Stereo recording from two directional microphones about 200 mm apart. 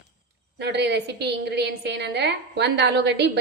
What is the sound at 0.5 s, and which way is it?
A woman's voice, 55° right (ahead or behind).